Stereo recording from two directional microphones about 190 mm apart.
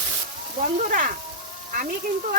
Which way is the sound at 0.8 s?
45° right (ahead or behind).